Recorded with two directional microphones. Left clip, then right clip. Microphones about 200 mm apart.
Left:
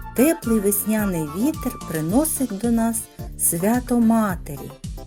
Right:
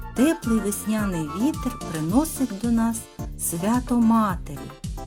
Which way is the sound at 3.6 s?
20° left (ahead or behind).